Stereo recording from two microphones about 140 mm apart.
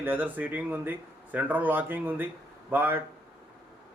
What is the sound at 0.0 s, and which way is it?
Speech, 15° right (ahead or behind).